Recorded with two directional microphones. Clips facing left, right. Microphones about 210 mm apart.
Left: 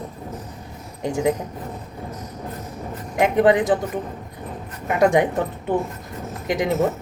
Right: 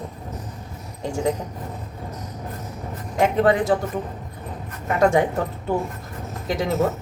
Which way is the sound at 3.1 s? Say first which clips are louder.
Left 2 dB; 15° left (ahead or behind).